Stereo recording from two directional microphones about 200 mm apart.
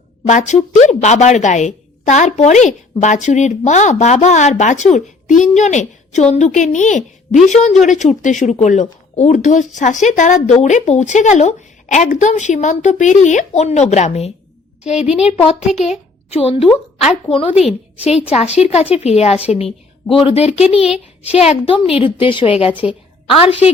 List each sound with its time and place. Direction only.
0.3 s a woman's voice: 35° left (ahead or behind)
15.0 s speech: 5° right (ahead or behind)
15.3 s a woman's voice: 30° left (ahead or behind)
17.5 s speech: centre (ahead or behind)
18.3 s a woman's voice: 30° left (ahead or behind)
19.5 s a sound: 30° left (ahead or behind)
20.2 s a woman's voice: 30° left (ahead or behind)
22.7 s a woman's voice: 5° right (ahead or behind)
23.2 s a woman's voice: 30° left (ahead or behind)
23.5 s a woman's voice: 10° right (ahead or behind)